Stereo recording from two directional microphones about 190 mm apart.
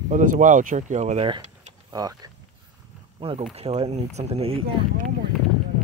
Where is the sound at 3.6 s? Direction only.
35° right (ahead or behind).